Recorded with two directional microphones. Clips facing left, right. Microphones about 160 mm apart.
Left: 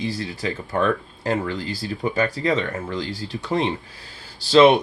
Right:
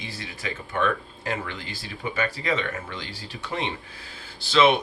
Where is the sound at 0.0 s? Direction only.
30° left (ahead or behind).